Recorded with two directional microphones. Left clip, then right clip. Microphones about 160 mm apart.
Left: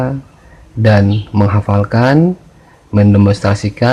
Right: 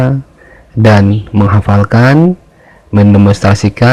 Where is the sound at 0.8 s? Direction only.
35° right (ahead or behind).